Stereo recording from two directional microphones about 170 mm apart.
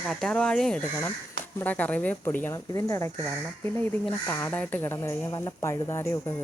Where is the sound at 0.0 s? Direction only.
Centre (ahead or behind).